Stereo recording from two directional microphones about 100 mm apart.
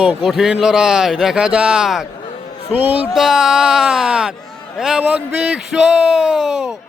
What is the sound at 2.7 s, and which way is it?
Speech, 15° right (ahead or behind).